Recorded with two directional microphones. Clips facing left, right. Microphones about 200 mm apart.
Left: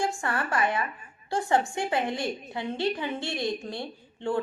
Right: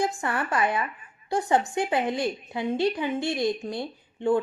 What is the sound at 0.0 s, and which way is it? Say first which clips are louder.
A woman's voice: right 2 dB; 20° right (ahead or behind).